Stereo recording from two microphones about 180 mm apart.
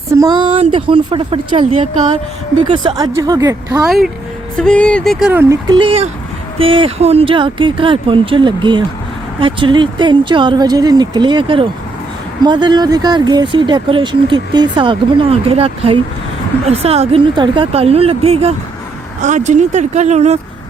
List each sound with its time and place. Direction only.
0.1 s speech: 20° right (ahead or behind)
3.8 s speech: centre (ahead or behind)
5.2 s speech: 10° right (ahead or behind)
5.6 s a woman's voice: 25° right (ahead or behind)